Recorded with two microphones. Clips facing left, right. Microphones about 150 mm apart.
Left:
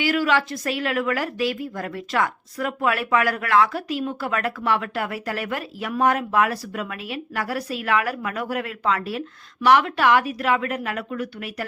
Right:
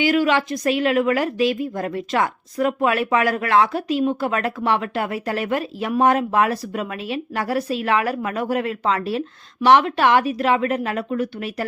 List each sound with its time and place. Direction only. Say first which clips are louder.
0.0 s a woman's voice: right 3 dB; 20° right (ahead or behind)